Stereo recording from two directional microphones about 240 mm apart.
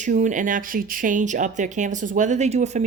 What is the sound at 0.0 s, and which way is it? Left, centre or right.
Speech, right.